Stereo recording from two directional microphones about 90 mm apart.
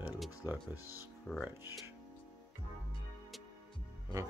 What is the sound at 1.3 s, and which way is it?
Speech, 20° left (ahead or behind).